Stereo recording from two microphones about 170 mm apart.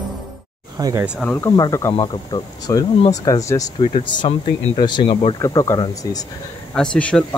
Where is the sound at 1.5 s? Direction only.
20° left (ahead or behind).